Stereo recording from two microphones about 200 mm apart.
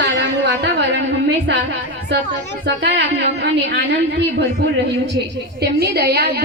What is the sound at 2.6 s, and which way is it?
A woman's voice, 60° right (ahead or behind).